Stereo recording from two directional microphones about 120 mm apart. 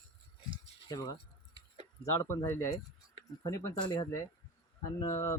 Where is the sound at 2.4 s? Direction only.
20° left (ahead or behind).